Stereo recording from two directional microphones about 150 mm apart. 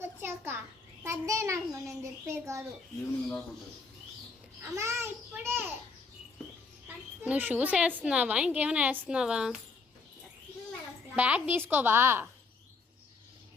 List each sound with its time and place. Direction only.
0.0 s a sound: 15° right (ahead or behind)
1.0 s a child's voice: 20° right (ahead or behind)
4.7 s a woman's voice: 20° right (ahead or behind)
6.8 s a woman's voice: 10° right (ahead or behind)
11.2 s a woman's voice: 10° right (ahead or behind)